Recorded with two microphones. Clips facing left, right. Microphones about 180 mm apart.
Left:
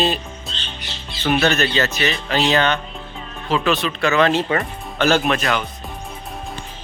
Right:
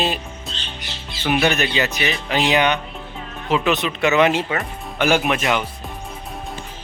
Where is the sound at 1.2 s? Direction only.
15° right (ahead or behind).